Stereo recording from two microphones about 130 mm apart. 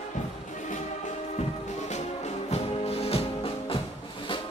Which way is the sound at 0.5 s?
70° left (ahead or behind).